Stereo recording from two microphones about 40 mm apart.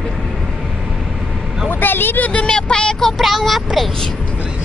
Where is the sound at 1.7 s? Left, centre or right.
Left.